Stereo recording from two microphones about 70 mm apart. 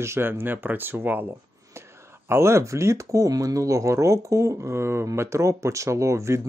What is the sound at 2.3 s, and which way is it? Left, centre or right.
Speech, right.